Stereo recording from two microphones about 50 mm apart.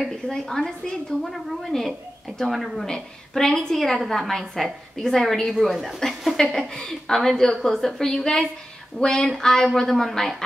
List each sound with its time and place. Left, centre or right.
0.1 s a woman's voice: centre
5.5 s a woman's voice: centre